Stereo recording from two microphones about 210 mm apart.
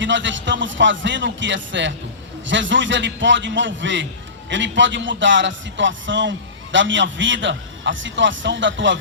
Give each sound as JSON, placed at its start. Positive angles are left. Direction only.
{"t": 0.0, "sound": "a man's voice", "side_deg": -60}